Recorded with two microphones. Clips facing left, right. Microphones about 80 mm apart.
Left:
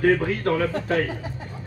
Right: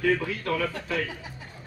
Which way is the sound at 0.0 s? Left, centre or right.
Left.